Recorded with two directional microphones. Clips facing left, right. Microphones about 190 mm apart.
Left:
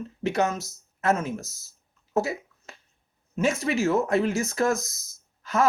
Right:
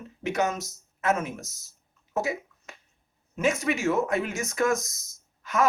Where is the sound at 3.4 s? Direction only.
30° left (ahead or behind).